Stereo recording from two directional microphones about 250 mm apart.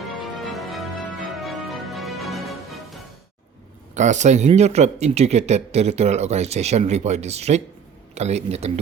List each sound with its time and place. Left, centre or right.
0.5 s music: centre
3.9 s speech: right